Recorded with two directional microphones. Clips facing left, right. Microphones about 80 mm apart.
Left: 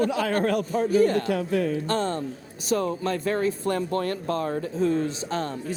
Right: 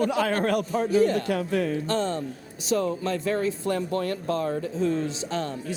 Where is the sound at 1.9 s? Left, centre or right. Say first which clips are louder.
Even; left.